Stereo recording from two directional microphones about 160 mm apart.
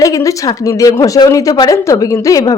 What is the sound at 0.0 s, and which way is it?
Speech, 20° left (ahead or behind).